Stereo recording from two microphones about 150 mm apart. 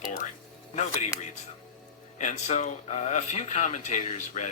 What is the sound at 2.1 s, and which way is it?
A man's voice, 55° left (ahead or behind).